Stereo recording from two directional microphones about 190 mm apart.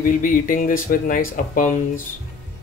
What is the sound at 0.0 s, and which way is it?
Speech, 45° left (ahead or behind).